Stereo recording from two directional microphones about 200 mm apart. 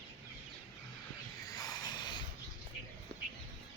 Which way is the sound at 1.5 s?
20° left (ahead or behind).